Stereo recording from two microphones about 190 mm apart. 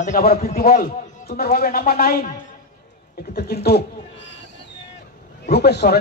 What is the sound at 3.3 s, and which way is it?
Speech, 55° left (ahead or behind).